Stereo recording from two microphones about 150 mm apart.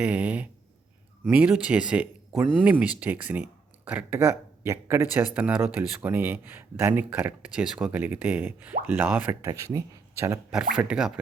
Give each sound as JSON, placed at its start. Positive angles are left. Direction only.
{"t": 0.0, "sound": "speech", "side_deg": -10}
{"t": 10.5, "sound": "speech", "side_deg": -5}